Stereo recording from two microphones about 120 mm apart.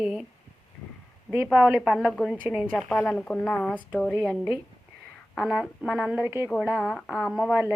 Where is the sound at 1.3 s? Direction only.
5° left (ahead or behind).